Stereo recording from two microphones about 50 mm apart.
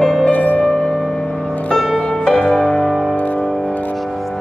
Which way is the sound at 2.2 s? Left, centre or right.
Centre.